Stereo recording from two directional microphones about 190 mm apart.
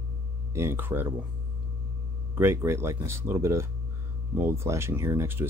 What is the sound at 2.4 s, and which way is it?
Speech, 10° right (ahead or behind).